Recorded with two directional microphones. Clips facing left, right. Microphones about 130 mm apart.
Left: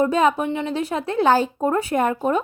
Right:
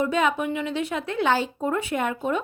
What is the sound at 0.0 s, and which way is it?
A woman's voice, 35° left (ahead or behind).